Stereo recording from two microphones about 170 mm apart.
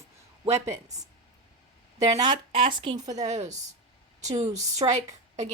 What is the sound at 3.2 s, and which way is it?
Speech, 40° right (ahead or behind).